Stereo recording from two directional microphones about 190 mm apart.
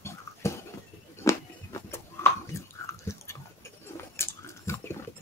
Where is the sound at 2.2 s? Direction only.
15° left (ahead or behind).